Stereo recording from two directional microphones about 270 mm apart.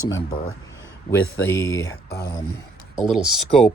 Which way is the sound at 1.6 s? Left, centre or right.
Centre.